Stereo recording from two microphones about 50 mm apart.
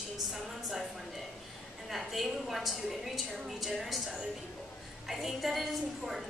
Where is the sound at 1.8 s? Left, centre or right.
Centre.